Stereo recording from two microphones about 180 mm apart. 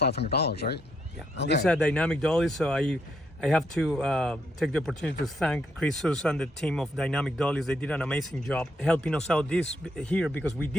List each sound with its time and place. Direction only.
0.0 s speech: 65° left (ahead or behind)
1.6 s speech: 5° left (ahead or behind)